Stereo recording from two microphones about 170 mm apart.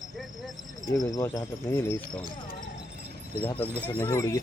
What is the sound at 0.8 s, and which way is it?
Speech, 20° left (ahead or behind).